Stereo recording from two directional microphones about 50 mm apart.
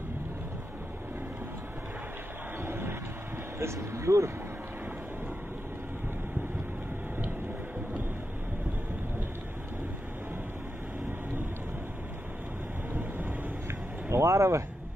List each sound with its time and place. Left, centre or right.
2.6 s vehicle: right
3.5 s speech: right
14.1 s vehicle: right